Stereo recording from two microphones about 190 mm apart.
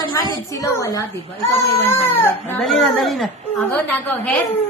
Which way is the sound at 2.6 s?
Centre (ahead or behind).